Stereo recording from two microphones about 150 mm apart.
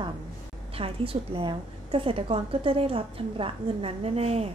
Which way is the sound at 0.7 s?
40° right (ahead or behind).